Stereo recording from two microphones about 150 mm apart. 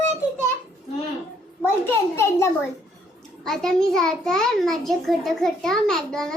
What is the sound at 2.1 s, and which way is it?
Speech, 20° left (ahead or behind).